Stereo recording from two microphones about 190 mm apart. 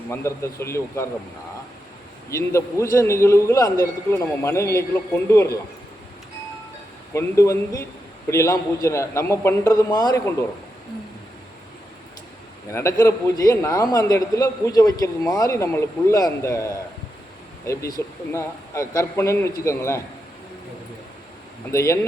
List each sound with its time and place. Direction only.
0.1 s a man's voice: 15° left (ahead or behind)
2.3 s a man's voice: 15° left (ahead or behind)
7.1 s a man's voice: 15° left (ahead or behind)
12.7 s a man's voice: 15° left (ahead or behind)
21.7 s a man's voice: 15° left (ahead or behind)